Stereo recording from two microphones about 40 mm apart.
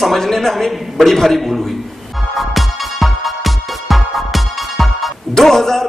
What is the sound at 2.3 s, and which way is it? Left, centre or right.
Music, centre.